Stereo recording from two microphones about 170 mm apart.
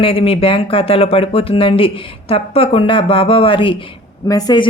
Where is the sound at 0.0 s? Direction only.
35° left (ahead or behind).